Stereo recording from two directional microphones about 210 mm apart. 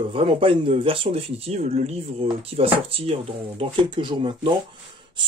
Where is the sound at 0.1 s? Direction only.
25° right (ahead or behind).